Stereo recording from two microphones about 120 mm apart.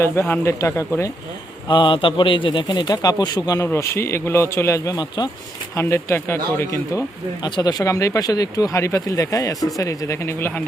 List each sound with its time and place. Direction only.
0.0 s speech: 20° left (ahead or behind)
1.6 s speech: 45° left (ahead or behind)
5.7 s speech: 25° left (ahead or behind)
7.4 s speech: 35° left (ahead or behind)